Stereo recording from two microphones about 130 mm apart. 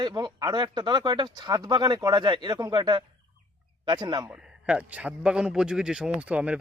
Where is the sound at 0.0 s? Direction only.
35° right (ahead or behind).